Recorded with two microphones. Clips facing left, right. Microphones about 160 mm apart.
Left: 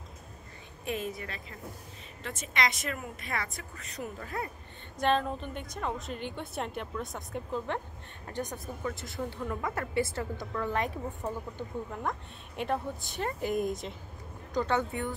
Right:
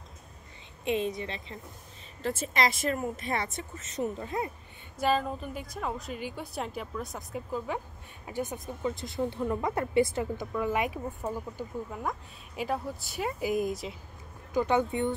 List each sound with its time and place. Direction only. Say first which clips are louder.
0.8 s speech: right 5 dB; 25° right (ahead or behind)
2.2 s a woman's voice: right 4 dB; 35° right (ahead or behind)
5.0 s a woman's voice: even; 5° right (ahead or behind)
8.8 s a woman's voice: right 5 dB; 20° right (ahead or behind); by 13.9 s centre (ahead or behind)
14.5 s speech: right 3 dB; 15° right (ahead or behind)